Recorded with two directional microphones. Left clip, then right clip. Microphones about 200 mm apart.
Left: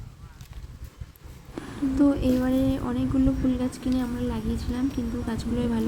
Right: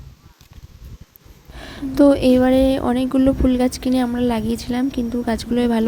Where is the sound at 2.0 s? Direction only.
45° right (ahead or behind).